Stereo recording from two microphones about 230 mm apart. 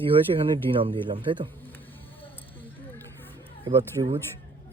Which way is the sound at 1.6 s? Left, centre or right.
Centre.